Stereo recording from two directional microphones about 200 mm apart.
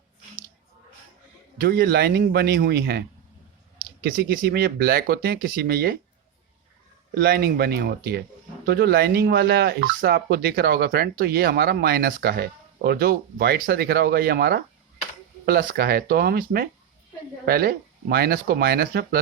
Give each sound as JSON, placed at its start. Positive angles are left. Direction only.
{"t": 1.6, "sound": "speech", "side_deg": -50}
{"t": 4.0, "sound": "speech", "side_deg": -45}
{"t": 7.1, "sound": "speech", "side_deg": -50}